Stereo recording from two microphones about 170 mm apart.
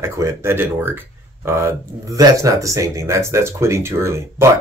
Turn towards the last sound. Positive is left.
turn(degrees=-15)  # may be behind; listen again after turning